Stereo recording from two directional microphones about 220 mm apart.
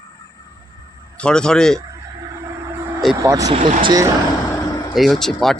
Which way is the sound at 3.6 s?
35° right (ahead or behind).